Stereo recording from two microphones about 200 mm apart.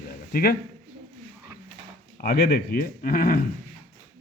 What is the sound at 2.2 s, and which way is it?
Speech, 50° left (ahead or behind).